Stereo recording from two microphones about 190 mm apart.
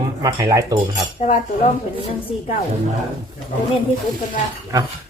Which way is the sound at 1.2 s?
40° left (ahead or behind).